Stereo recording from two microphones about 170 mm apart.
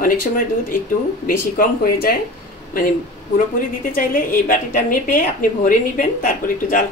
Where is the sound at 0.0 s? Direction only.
55° left (ahead or behind).